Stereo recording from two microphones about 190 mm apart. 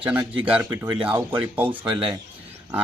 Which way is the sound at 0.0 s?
10° right (ahead or behind).